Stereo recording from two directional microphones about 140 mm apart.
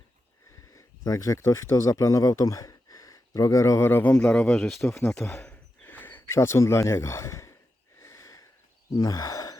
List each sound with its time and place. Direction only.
0.7 s speech: 25° left (ahead or behind)
4.6 s speech: centre (ahead or behind)
4.9 s speech: 20° left (ahead or behind)
7.9 s sniff: 20° left (ahead or behind)
9.0 s sigh: 25° left (ahead or behind)